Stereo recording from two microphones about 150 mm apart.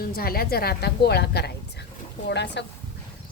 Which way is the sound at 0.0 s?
85° left.